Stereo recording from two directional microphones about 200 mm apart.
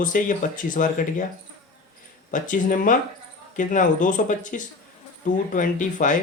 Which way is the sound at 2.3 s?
40° left (ahead or behind).